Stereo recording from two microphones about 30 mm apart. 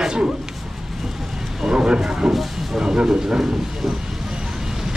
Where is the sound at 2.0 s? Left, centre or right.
Right.